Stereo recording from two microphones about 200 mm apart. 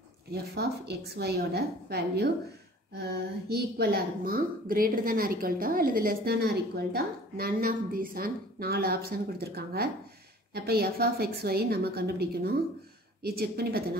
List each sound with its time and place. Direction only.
0.3 s a woman's voice: 55° right (ahead or behind)
3.4 s a woman's voice: 50° right (ahead or behind)